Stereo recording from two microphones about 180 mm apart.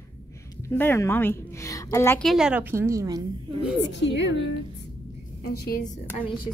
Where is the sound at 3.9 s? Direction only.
75° left (ahead or behind).